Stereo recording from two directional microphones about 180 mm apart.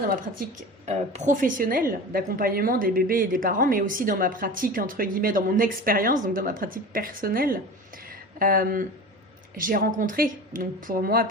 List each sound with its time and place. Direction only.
0.8 s a woman's voice: 40° right (ahead or behind)